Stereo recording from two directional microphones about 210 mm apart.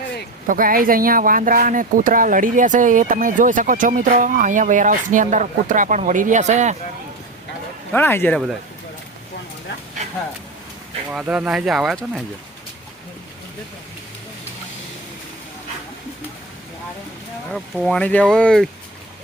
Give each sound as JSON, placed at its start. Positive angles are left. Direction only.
{"t": 0.4, "sound": "speech", "side_deg": -40}
{"t": 7.9, "sound": "speech", "side_deg": 10}
{"t": 11.1, "sound": "speech", "side_deg": -5}
{"t": 17.5, "sound": "speech", "side_deg": 0}